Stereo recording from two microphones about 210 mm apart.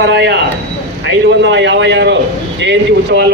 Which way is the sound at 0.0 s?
55° right (ahead or behind).